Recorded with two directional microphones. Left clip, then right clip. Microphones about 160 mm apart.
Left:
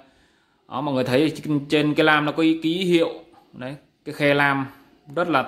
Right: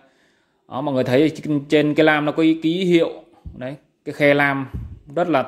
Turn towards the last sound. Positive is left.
turn(degrees=-20)  # may be behind; listen again after turning